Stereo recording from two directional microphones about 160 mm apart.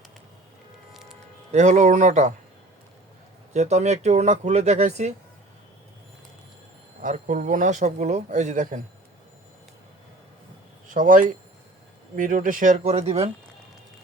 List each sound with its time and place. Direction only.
1.5 s a man's voice: 45° right (ahead or behind)
3.5 s a man's voice: 45° right (ahead or behind)
7.0 s a man's voice: 55° right (ahead or behind)
10.9 s a man's voice: 55° right (ahead or behind); by 13.3 s 40° right (ahead or behind)